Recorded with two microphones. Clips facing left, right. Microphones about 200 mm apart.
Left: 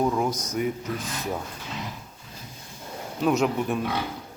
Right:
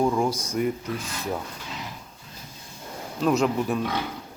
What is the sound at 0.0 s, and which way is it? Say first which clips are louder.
Speech: right 1 dB; 5° left (ahead or behind).